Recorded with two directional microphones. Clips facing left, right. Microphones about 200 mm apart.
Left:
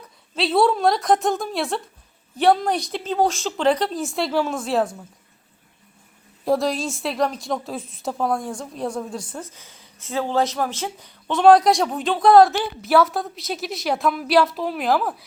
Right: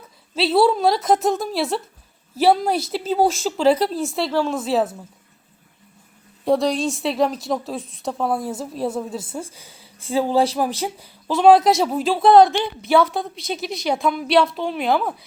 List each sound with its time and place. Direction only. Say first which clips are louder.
0.3 s a woman's voice: right 2 dB; centre (ahead or behind)
6.4 s a woman's voice: right 2 dB; centre (ahead or behind)
9.8 s a sound: right 6 dB; 30° right (ahead or behind)
10.2 s a woman's voice: right 3 dB; 10° right (ahead or behind)